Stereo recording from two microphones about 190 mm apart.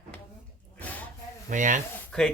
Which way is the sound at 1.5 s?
40° right (ahead or behind).